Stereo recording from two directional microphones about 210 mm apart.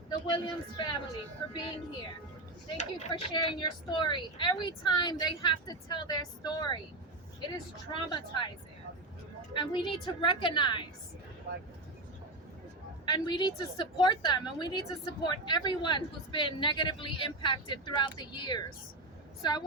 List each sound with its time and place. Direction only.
0.1 s a woman's voice: 25° left (ahead or behind)
2.7 s a woman's voice: 30° left (ahead or behind)
7.9 s a woman's voice: 25° left (ahead or behind)
9.6 s a woman's voice: 20° left (ahead or behind)
13.1 s a woman's voice: 20° left (ahead or behind)